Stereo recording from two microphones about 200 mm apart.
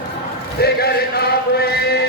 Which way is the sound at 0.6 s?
50° left (ahead or behind).